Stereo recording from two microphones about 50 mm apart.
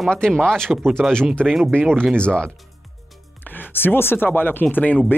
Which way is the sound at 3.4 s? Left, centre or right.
Left.